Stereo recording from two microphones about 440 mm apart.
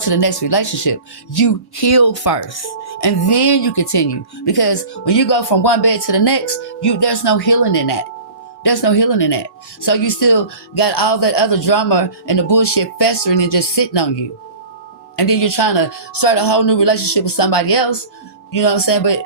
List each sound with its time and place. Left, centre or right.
0.0 s speech: left
2.5 s speech: left
3.0 s speech: left
15.1 s speech: left